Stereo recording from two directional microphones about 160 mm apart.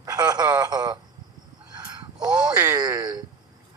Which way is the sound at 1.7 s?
25° right (ahead or behind).